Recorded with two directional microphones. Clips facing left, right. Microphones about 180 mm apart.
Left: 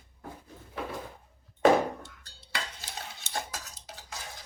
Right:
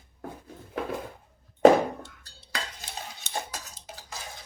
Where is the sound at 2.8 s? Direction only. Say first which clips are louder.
Right 2 dB; 20° right (ahead or behind).